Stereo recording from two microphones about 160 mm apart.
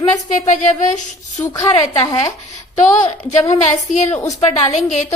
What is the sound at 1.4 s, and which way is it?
Speech, 20° left (ahead or behind).